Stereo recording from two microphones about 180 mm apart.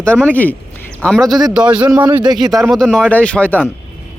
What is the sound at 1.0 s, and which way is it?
Speech, 5° left (ahead or behind).